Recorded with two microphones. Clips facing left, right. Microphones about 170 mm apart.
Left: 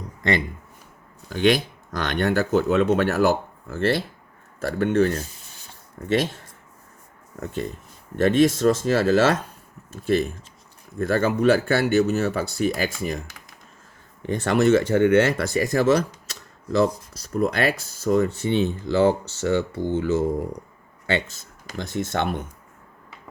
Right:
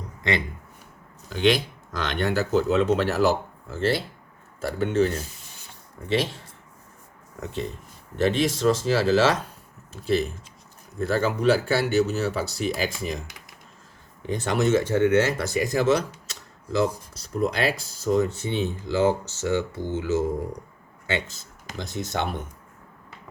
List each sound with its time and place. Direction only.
1.3 s speech: 50° left (ahead or behind)
8.2 s speech: 50° left (ahead or behind)
14.2 s speech: 60° left (ahead or behind)
17.2 s speech: 60° left (ahead or behind)
21.8 s speech: 55° left (ahead or behind)